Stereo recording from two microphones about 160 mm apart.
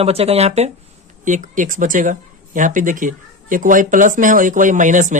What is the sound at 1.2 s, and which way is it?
Speech, 55° right (ahead or behind).